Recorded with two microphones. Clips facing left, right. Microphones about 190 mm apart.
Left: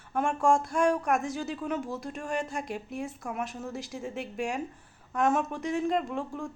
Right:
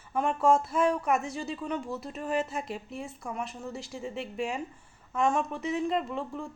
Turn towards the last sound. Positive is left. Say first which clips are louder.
# left 1 dB
turn(degrees=0)  # may be behind; listen again after turning